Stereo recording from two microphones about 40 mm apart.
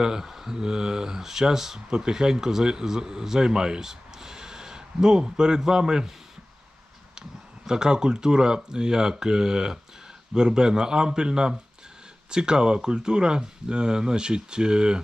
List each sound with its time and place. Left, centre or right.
0.0 s speech: centre
7.7 s speech: centre